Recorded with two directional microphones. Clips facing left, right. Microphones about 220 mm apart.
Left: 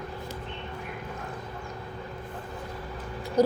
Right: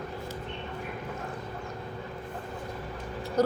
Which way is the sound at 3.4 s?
10° left (ahead or behind).